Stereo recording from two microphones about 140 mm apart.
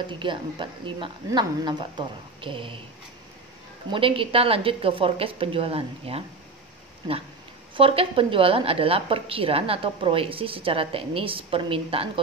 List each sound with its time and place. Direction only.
0.2 s a woman's voice: 35° right (ahead or behind)
3.9 s a woman's voice: 40° right (ahead or behind)
7.7 s a woman's voice: 40° right (ahead or behind)